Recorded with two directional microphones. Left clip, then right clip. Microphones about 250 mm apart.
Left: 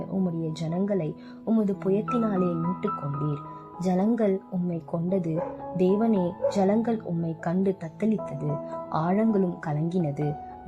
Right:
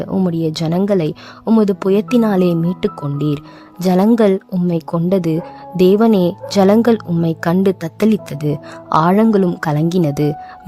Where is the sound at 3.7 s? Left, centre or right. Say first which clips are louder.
Right 13 dB; right.